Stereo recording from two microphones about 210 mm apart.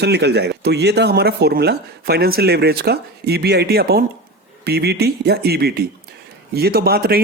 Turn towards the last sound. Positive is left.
turn(degrees=-45)  # may be behind; listen again after turning